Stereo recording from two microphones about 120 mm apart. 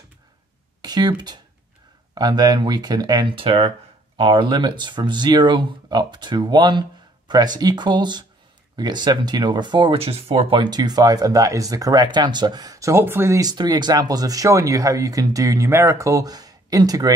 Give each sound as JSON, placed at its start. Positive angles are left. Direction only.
{"t": 0.8, "sound": "speech", "side_deg": -35}